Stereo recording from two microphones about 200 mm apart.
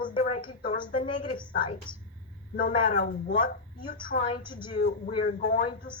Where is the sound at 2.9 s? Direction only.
45° left (ahead or behind).